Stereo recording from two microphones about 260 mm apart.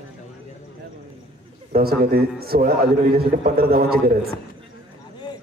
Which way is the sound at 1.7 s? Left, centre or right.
Right.